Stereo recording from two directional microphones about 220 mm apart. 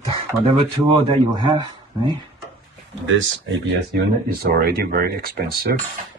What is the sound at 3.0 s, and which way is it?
Speech, 60° right (ahead or behind).